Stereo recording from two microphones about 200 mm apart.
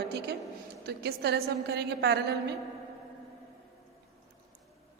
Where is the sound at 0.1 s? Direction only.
55° right (ahead or behind).